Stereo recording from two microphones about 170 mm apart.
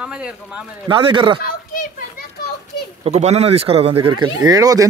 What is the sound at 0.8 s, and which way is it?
Speech, 30° right (ahead or behind).